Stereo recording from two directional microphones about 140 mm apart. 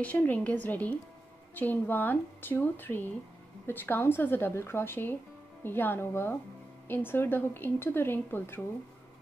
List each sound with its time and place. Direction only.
0.0 s speech: 10° left (ahead or behind)